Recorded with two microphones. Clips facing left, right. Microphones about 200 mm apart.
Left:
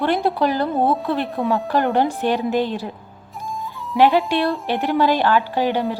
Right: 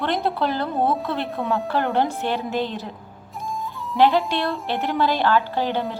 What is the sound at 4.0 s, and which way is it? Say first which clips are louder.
A woman's voice: left 3 dB; 15° left (ahead or behind).